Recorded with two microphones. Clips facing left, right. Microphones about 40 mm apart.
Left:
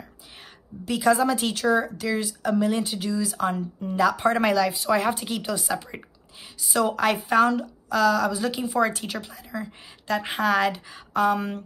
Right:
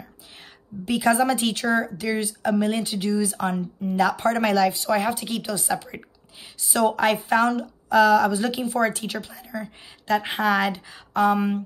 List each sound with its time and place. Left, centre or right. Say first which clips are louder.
0.8 s speech: right 1 dB; centre
1.5 s speech: left 1 dB; centre
1.8 s speech: right 1 dB; centre
7.9 s speech: right 4 dB; centre